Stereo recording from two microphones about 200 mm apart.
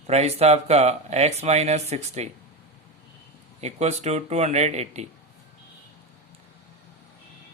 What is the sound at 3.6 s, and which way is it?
Speech, 35° right (ahead or behind).